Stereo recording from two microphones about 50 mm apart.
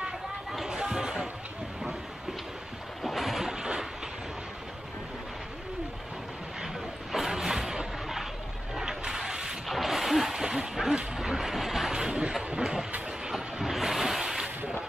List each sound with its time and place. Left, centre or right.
0.0 s a sound: centre
0.7 s a sound: centre
3.0 s boat: centre
3.4 s boat: centre
6.6 s vehicle: centre
8.7 s a sound: centre
9.7 s bow-wow: centre
12.4 s train: centre
13.3 s boat: centre